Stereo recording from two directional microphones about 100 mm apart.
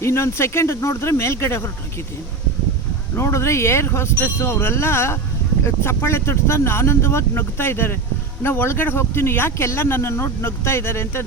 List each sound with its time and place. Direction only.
0.0 s speech: 25° left (ahead or behind)
3.2 s speech: 30° left (ahead or behind)